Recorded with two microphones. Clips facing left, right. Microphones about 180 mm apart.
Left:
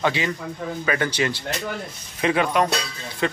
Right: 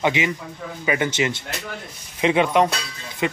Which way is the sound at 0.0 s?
20° right (ahead or behind).